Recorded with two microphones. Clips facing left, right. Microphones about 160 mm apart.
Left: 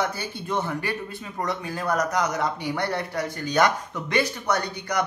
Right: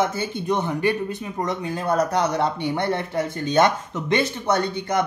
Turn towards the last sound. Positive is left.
turn(degrees=-25)  # may be behind; listen again after turning